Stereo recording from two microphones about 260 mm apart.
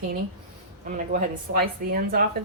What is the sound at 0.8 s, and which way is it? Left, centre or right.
A woman's voice, right.